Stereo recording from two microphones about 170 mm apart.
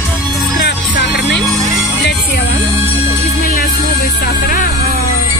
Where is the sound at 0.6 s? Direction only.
80° left.